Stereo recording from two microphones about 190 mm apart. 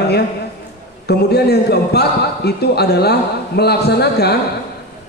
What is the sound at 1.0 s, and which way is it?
A man's voice, 60° left (ahead or behind).